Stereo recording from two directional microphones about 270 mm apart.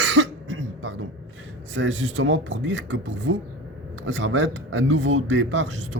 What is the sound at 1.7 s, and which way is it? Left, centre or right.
Speech, right.